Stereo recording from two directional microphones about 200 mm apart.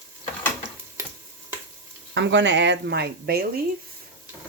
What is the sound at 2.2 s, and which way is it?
Speech, 65° right (ahead or behind).